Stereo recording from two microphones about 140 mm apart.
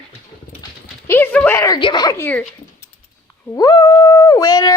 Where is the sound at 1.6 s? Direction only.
30° left (ahead or behind).